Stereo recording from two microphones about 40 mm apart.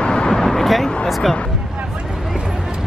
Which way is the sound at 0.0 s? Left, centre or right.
Left.